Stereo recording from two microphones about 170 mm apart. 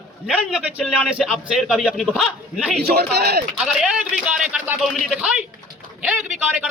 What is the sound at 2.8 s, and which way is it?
Speech, 65° right (ahead or behind).